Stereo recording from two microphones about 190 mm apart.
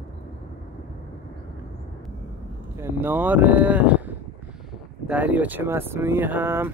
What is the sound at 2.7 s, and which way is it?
Speech, 10° right (ahead or behind).